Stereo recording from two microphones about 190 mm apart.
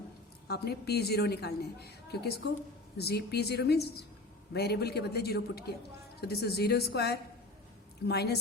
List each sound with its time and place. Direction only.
0.4 s a woman's voice: 60° left (ahead or behind)